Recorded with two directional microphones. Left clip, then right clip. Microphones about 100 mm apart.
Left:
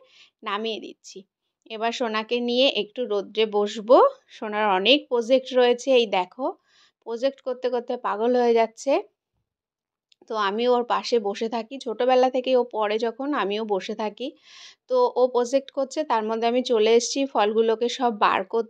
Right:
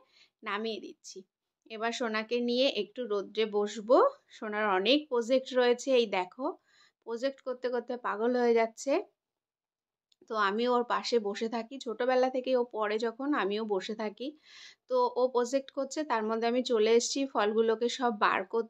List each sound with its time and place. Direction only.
0.1 s a woman's voice: 40° left (ahead or behind)
10.2 s speech: 25° left (ahead or behind)